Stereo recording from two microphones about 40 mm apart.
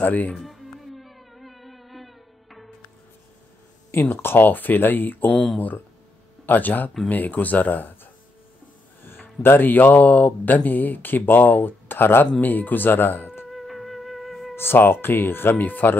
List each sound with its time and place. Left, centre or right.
0.0 s speech: left
0.4 s music: centre
4.2 s speech: left
6.4 s speech: left
9.0 s speech: left
12.4 s speech: left
13.5 s music: centre
14.5 s speech: left
15.6 s speech: left